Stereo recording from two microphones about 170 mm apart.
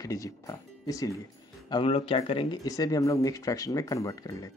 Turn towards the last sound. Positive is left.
turn(degrees=20)  # may be behind; listen again after turning